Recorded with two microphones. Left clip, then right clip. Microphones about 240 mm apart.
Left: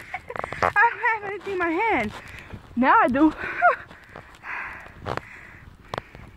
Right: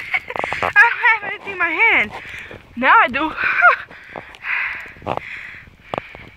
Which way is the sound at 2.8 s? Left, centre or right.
Right.